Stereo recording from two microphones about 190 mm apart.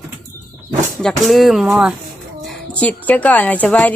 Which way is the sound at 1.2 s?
Centre (ahead or behind).